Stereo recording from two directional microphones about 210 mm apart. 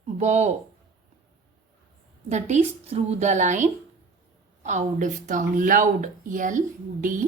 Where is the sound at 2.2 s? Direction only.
35° right (ahead or behind).